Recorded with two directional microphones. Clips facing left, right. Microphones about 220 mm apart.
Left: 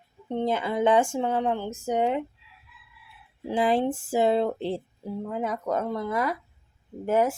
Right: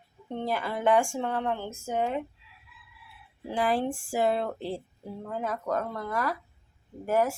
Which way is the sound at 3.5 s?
20° left (ahead or behind).